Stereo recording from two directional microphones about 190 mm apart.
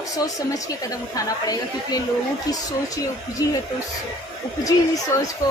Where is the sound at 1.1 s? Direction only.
20° left (ahead or behind).